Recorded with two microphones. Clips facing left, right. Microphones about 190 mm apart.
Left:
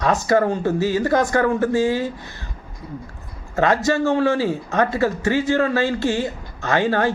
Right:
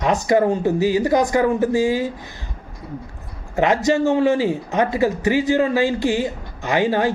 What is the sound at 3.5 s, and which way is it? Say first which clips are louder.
A man's voice: right 1 dB; 15° right (ahead or behind).